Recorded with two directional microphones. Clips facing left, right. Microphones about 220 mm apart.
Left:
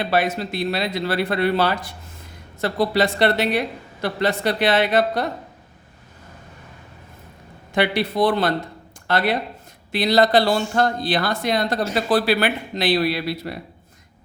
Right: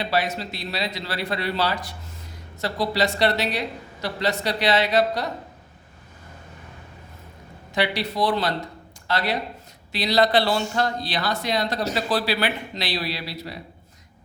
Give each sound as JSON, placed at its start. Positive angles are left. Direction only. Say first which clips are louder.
{"t": 0.0, "sound": "speech", "louder": "left 4 dB", "side_deg": 55}
{"t": 7.7, "sound": "speech", "louder": "left 4 dB", "side_deg": 55}